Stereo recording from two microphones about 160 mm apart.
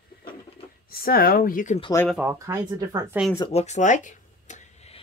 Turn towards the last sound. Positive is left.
turn(degrees=50)  # may be behind; listen again after turning